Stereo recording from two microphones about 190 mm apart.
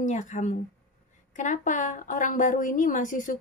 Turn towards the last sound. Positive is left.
turn(degrees=45)  # may be behind; listen again after turning